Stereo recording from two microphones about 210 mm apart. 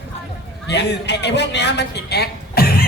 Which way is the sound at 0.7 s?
55° left (ahead or behind).